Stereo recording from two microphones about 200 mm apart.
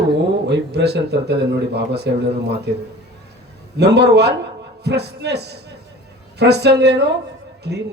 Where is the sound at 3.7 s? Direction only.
55° right (ahead or behind).